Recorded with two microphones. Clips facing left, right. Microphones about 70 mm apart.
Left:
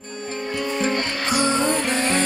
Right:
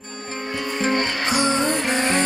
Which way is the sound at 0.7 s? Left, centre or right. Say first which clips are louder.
Right 3 dB; right.